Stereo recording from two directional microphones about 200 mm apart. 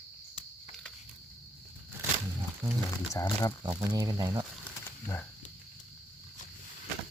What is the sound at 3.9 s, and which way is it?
Speech, 20° right (ahead or behind).